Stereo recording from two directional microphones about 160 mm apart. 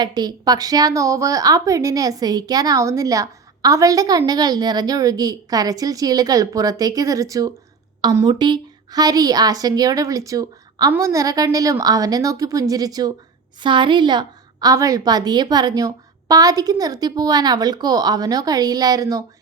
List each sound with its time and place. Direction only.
0.0 s a woman's voice: 25° right (ahead or behind)